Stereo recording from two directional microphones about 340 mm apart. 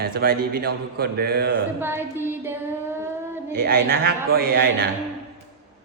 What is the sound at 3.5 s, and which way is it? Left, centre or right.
A man's voice, right.